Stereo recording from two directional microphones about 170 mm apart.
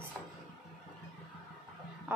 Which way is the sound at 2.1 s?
10° right (ahead or behind).